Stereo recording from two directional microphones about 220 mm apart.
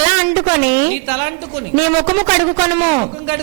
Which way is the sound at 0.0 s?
10° right (ahead or behind).